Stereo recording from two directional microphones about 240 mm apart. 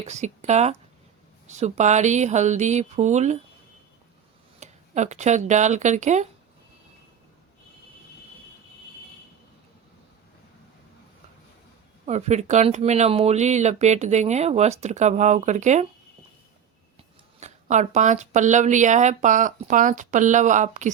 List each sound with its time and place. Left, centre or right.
0.0 s speech: right
4.6 s speech: right
12.0 s speech: right
17.4 s speech: right